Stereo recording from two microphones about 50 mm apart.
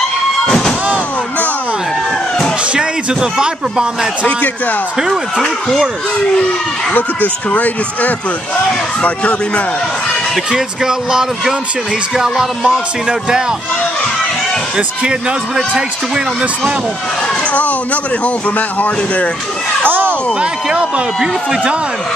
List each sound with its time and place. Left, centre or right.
0.5 s music: centre
2.7 s a man's voice: centre
5.4 s speech: centre
6.9 s speech: left
10.5 s a man's voice: centre
17.5 s speech: left
18.8 s speech: left
19.9 s a sound: right
20.3 s speech: right